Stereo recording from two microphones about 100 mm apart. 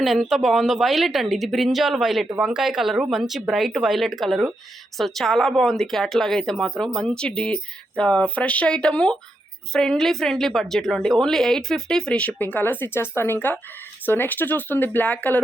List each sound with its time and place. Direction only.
0.0 s a woman's voice: centre (ahead or behind); by 15.4 s 15° left (ahead or behind)